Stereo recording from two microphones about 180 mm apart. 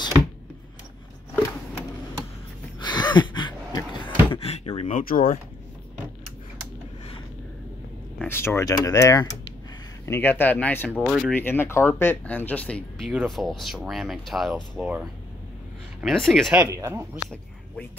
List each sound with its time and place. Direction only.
2.8 s a sound: 25° left (ahead or behind); by 5.4 s 50° left (ahead or behind)
8.2 s speech: 15° left (ahead or behind)
16.6 s speech: 15° right (ahead or behind)